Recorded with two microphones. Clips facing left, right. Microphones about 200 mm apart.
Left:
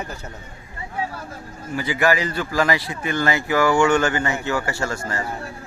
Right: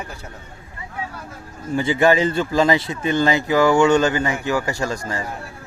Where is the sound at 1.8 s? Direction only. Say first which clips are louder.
Right 4 dB; 25° right (ahead or behind).